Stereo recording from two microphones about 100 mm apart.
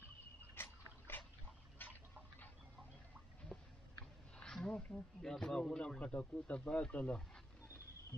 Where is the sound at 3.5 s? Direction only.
10° left (ahead or behind).